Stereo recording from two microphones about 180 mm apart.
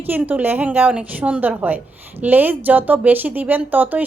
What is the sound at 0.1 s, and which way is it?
Speech, 10° right (ahead or behind).